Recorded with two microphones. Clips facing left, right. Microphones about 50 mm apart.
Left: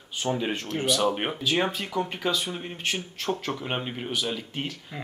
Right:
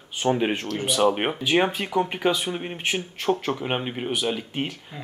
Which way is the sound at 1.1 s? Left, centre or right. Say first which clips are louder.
Right 4 dB; right.